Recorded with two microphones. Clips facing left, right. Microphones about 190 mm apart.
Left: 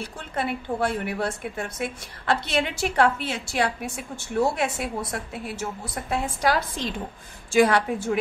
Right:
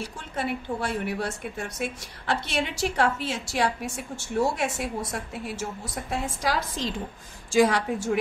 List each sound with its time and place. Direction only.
0.0 s a woman's voice: 55° left (ahead or behind)